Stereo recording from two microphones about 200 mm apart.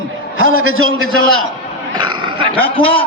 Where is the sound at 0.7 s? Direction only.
90° right.